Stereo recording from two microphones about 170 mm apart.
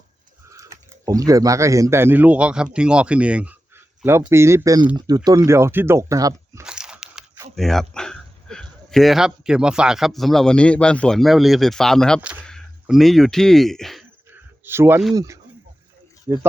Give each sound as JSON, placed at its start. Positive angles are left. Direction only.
{"t": 0.5, "sound": "speech", "side_deg": -20}
{"t": 6.7, "sound": "a sound", "side_deg": -5}
{"t": 7.5, "sound": "speech", "side_deg": 0}
{"t": 12.2, "sound": "speech", "side_deg": -5}
{"t": 14.6, "sound": "speech", "side_deg": -15}